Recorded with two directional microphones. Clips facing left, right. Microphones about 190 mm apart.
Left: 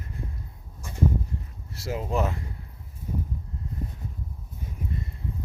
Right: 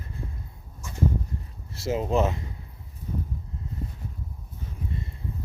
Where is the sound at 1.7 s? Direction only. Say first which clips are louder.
Right 4 dB; 25° right (ahead or behind).